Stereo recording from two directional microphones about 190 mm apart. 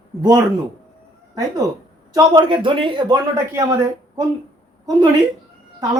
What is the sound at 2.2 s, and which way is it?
Speech, 20° right (ahead or behind).